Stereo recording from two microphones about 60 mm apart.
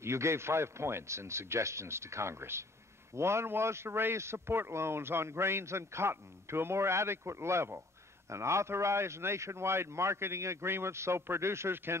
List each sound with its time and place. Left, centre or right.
0.0 s a man's voice: right